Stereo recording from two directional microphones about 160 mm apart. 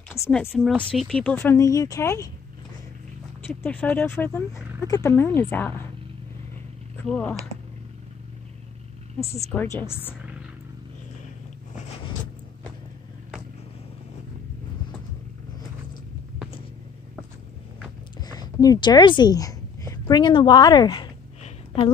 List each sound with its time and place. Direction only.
0.3 s speech: 10° left (ahead or behind)
3.6 s speech: 10° left (ahead or behind)
7.1 s speech: 5° left (ahead or behind)
9.2 s a woman's voice: 40° left (ahead or behind)
9.5 s speech: 10° left (ahead or behind)
18.2 s a woman's voice: 25° left (ahead or behind)
21.4 s a sound: 35° left (ahead or behind)